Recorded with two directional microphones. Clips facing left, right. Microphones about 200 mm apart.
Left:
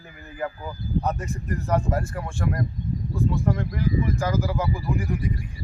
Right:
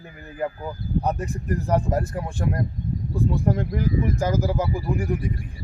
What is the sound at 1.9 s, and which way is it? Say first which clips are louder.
Speech: right 2 dB; 20° right (ahead or behind).